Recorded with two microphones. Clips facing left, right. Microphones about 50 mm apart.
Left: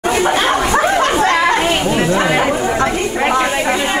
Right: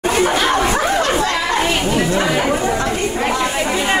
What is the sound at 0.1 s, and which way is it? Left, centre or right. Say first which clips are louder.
Chatter: left 2 dB; left.